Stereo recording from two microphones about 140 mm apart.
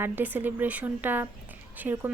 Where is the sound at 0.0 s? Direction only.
15° right (ahead or behind).